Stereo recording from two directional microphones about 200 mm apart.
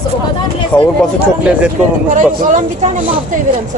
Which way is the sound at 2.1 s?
40° right (ahead or behind).